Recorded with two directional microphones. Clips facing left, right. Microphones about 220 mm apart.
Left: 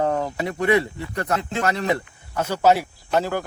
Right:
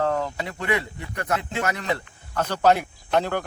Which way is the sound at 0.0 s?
20° left (ahead or behind).